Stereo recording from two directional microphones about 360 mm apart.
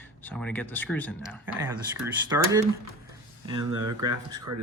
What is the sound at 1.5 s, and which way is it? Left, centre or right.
Speech, centre.